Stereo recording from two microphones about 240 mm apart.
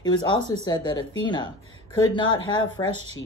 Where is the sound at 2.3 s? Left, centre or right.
Left.